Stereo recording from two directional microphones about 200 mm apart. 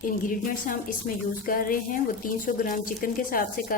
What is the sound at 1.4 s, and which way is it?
Speech, 45° left (ahead or behind).